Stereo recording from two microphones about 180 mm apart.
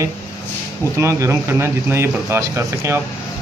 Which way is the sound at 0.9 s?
15° right (ahead or behind).